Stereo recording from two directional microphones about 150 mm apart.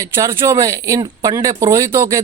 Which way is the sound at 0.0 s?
20° right (ahead or behind).